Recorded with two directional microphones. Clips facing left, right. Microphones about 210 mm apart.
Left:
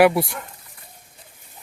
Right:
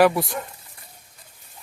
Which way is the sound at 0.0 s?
10° left (ahead or behind).